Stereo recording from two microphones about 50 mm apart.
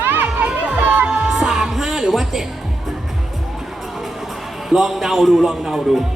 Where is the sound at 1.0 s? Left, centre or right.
Centre.